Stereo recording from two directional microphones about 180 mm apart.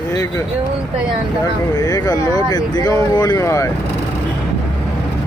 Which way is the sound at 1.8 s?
20° left (ahead or behind).